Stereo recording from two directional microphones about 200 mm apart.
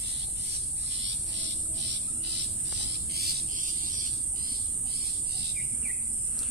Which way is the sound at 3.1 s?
50° right (ahead or behind).